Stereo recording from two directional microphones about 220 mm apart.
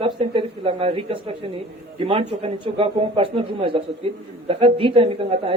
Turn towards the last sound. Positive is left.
turn(degrees=-25)  # may be behind; listen again after turning